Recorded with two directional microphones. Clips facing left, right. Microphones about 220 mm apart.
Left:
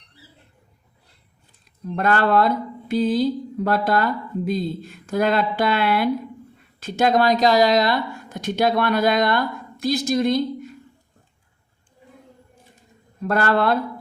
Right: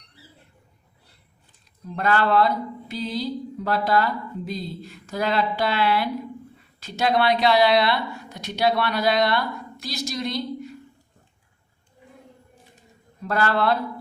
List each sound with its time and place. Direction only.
2.0 s speech: 50° left (ahead or behind)
13.2 s speech: 50° left (ahead or behind)